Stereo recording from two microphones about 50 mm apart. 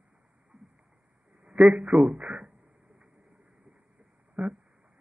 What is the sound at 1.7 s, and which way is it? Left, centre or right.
Speech, centre.